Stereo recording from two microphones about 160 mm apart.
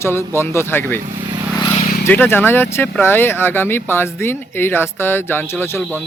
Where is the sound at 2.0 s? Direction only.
10° left (ahead or behind).